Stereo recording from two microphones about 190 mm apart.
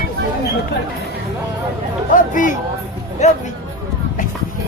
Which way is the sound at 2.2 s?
45° left (ahead or behind).